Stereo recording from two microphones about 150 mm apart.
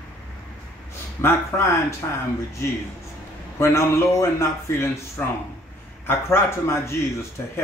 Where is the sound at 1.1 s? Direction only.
15° left (ahead or behind).